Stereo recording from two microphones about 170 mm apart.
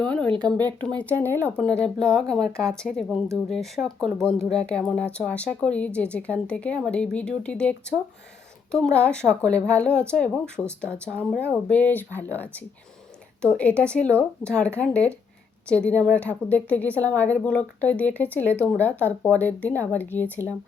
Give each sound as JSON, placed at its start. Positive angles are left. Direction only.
{"t": 0.0, "sound": "speech", "side_deg": 10}